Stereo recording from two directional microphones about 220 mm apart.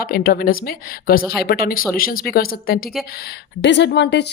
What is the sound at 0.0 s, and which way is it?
A woman's voice, 40° left (ahead or behind).